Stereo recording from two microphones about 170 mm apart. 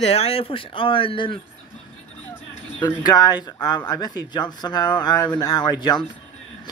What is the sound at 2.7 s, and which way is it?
A man's voice, 25° left (ahead or behind).